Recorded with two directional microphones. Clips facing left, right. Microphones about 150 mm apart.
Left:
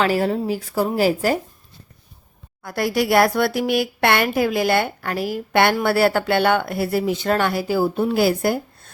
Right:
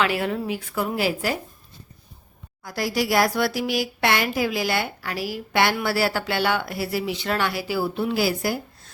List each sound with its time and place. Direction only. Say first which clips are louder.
0.0 s a woman's voice: left 4 dB; 40° left (ahead or behind)
2.6 s speech: left 4 dB; 55° left (ahead or behind)